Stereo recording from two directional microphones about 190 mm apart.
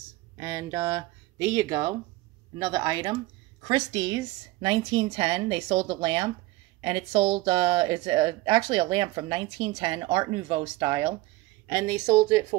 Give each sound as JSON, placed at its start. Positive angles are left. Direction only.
{"t": 0.4, "sound": "speech", "side_deg": -15}